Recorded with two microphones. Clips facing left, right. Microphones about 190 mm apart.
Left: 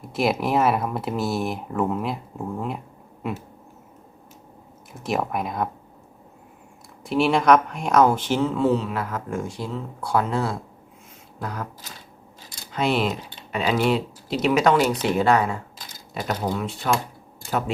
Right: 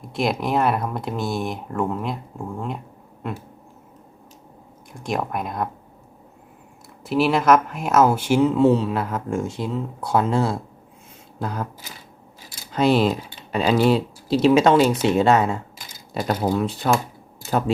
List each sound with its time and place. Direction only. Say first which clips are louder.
0.1 s speech: even; 5° left (ahead or behind)
4.9 s speech: even; centre (ahead or behind)
7.0 s speech: right 1 dB; centre (ahead or behind); by 11.6 s 25° right (ahead or behind)
12.7 s speech: right 5 dB; 35° right (ahead or behind)
16.3 s speech: right 5 dB; 40° right (ahead or behind)